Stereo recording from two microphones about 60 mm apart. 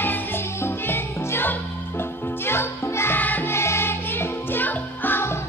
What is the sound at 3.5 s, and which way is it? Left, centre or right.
Music, left.